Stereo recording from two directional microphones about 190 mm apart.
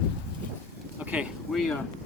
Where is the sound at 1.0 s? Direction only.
5° right (ahead or behind).